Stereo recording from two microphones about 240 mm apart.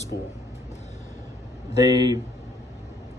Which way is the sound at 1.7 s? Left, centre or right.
Centre.